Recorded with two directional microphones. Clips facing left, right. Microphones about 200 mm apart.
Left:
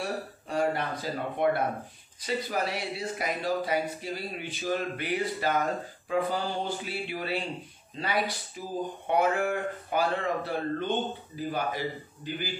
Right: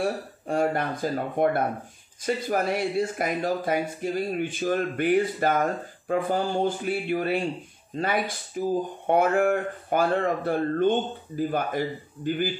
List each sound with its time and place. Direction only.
0.0 s speech: 50° right (ahead or behind)